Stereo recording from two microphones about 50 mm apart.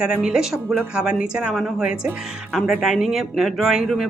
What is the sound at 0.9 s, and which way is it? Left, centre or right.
Speech, right.